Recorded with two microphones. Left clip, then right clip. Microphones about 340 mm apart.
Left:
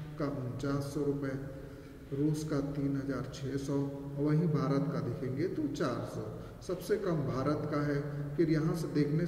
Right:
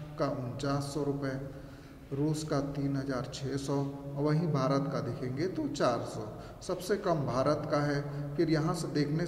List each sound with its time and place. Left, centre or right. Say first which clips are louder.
0.2 s a man's voice: right 4 dB; centre
2.3 s a man's voice: right 2 dB; centre